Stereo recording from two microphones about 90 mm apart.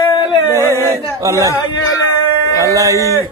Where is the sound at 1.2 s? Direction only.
35° right (ahead or behind).